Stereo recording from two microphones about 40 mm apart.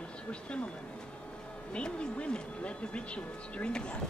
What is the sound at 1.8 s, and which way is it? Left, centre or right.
Speech, left.